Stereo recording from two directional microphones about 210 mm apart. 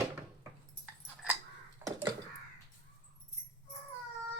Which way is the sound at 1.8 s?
10° right (ahead or behind).